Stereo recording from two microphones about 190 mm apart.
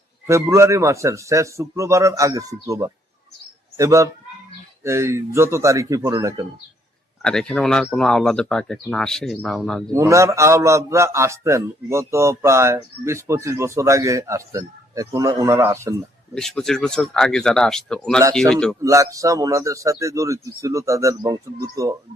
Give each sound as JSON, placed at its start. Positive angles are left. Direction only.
{"t": 0.3, "sound": "a man's voice", "side_deg": -15}
{"t": 7.2, "sound": "speech", "side_deg": 5}
{"t": 9.9, "sound": "a man's voice", "side_deg": -15}
{"t": 16.3, "sound": "speech", "side_deg": 5}
{"t": 18.8, "sound": "a man's voice", "side_deg": -15}